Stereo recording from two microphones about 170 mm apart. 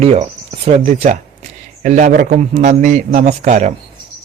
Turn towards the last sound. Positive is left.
turn(degrees=-45)  # may be behind; listen again after turning